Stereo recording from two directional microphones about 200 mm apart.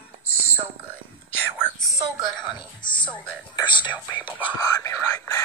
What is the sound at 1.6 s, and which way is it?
Whispering, 10° left (ahead or behind).